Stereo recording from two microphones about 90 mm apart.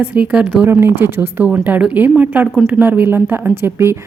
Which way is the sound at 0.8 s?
25° right (ahead or behind).